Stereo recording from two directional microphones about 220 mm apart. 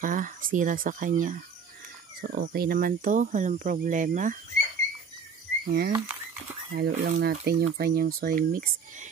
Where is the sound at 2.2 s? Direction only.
45° right (ahead or behind).